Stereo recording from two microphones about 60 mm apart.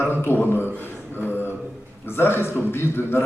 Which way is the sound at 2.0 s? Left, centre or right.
Left.